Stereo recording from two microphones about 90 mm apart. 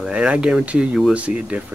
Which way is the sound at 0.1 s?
10° right (ahead or behind).